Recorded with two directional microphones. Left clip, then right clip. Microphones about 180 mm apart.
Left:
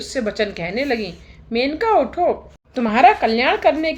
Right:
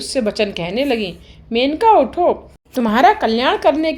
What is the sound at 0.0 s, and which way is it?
A woman's voice, 30° right (ahead or behind).